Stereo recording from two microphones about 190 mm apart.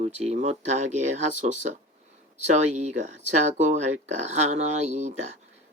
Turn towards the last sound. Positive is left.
turn(degrees=-40)  # may be behind; listen again after turning